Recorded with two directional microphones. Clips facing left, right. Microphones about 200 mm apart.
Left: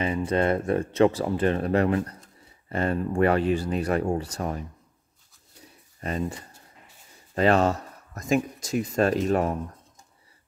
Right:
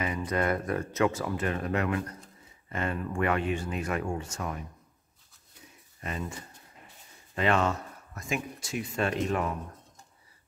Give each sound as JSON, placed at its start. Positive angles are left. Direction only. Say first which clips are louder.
{"t": 0.0, "sound": "speech", "louder": "left 5 dB", "side_deg": 30}
{"t": 5.9, "sound": "speech", "louder": "left 7 dB", "side_deg": 35}
{"t": 7.3, "sound": "speech", "louder": "left 6 dB", "side_deg": 40}